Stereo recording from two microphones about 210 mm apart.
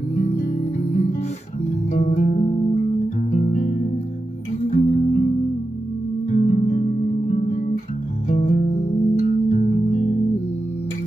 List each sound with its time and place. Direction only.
0.2 s music: 30° left (ahead or behind)
6.3 s music: 35° left (ahead or behind)